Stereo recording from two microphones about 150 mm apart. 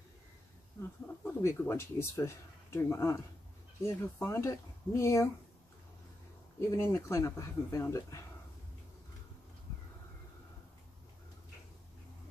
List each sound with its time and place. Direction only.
1.2 s speech: 15° left (ahead or behind)
6.7 s speech: 20° left (ahead or behind)